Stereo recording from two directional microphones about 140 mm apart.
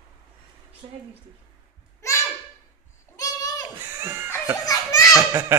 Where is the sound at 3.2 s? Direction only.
25° left (ahead or behind).